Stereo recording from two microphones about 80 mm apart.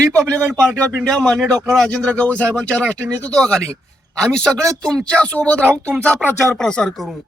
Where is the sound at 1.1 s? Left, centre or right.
Centre.